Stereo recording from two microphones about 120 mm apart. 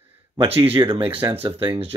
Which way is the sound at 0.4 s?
50° right (ahead or behind).